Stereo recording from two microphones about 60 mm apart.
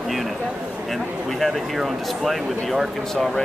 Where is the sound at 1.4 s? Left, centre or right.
Centre.